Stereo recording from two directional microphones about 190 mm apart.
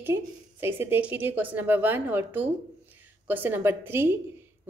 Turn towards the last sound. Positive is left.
turn(degrees=-10)  # may be behind; listen again after turning